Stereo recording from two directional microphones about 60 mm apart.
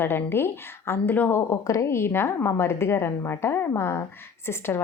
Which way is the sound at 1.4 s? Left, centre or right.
Left.